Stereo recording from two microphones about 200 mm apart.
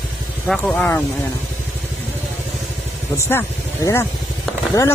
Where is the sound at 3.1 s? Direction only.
20° left (ahead or behind).